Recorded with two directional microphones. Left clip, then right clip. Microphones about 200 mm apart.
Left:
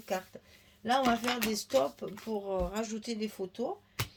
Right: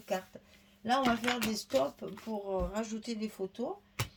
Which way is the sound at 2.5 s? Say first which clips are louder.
Even; 45° left (ahead or behind).